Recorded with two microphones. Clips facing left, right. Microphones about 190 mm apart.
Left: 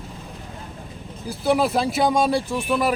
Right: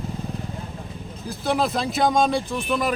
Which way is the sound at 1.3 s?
10° left (ahead or behind).